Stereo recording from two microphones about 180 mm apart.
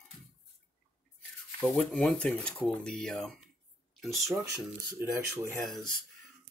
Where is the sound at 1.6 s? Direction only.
5° left (ahead or behind).